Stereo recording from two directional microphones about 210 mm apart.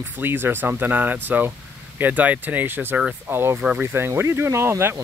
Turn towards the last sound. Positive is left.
turn(degrees=-10)  # may be behind; listen again after turning